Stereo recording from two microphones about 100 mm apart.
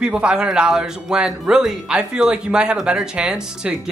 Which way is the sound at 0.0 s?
10° right (ahead or behind).